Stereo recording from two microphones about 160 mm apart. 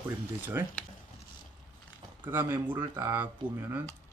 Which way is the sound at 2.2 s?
15° right (ahead or behind).